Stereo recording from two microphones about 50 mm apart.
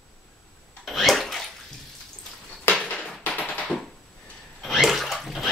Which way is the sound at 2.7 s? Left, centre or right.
Centre.